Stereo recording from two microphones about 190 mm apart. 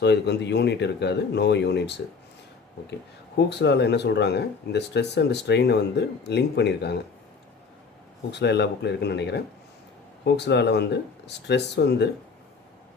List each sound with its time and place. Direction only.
0.0 s speech: 65° left (ahead or behind)
3.3 s speech: 65° left (ahead or behind)
8.3 s speech: 65° left (ahead or behind)